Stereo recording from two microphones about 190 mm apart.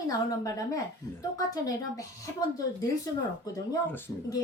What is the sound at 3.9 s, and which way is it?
Speech, 20° left (ahead or behind).